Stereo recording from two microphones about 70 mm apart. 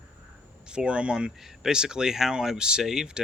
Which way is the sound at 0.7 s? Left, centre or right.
Centre.